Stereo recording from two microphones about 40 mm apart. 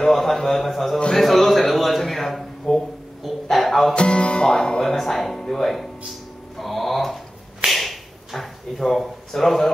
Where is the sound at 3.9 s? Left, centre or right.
Left.